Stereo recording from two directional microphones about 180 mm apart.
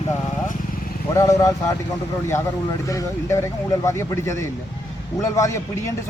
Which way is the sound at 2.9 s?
15° left (ahead or behind).